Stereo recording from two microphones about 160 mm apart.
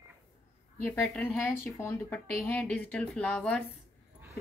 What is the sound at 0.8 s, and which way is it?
A woman's voice, 10° left (ahead or behind).